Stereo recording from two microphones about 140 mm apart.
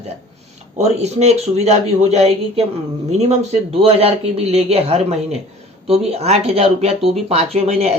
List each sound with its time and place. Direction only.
0.8 s a man's voice: 50° right (ahead or behind)